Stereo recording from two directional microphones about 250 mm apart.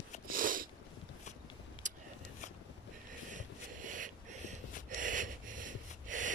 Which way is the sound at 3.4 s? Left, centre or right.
Right.